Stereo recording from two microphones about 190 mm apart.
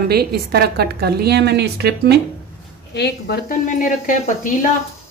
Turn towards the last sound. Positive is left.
turn(degrees=45)  # may be behind; listen again after turning